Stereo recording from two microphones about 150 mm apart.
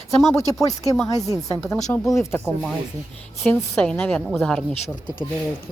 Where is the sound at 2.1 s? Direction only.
15° left (ahead or behind).